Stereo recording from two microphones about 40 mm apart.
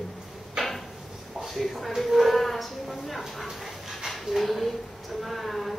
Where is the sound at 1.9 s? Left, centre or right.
Centre.